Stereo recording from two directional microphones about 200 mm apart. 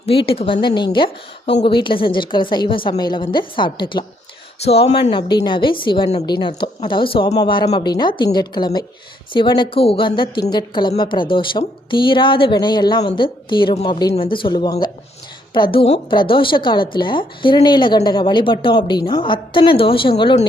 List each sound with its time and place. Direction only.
0.0 s a woman's voice: 25° left (ahead or behind)